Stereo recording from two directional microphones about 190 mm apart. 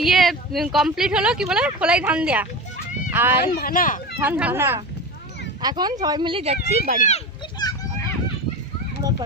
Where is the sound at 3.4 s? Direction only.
50° left (ahead or behind).